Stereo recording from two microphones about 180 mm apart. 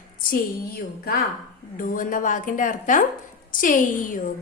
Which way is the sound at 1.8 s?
50° left (ahead or behind).